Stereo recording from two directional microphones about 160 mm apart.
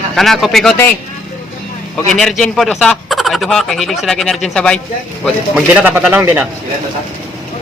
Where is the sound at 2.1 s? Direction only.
Centre (ahead or behind).